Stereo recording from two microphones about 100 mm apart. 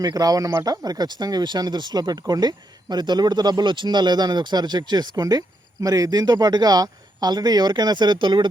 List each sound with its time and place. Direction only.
0.0 s speech: 40° right (ahead or behind)